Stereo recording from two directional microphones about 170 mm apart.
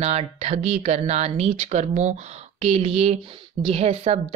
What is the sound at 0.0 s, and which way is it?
Speech, 40° right (ahead or behind).